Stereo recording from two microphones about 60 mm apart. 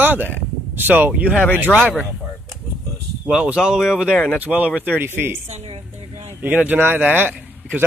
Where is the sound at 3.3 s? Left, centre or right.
Centre.